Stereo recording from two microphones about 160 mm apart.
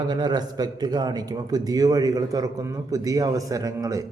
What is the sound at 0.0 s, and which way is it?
A man's voice, 25° right (ahead or behind).